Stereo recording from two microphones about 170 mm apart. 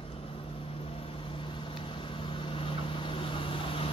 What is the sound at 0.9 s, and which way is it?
Vehicle, 35° left (ahead or behind).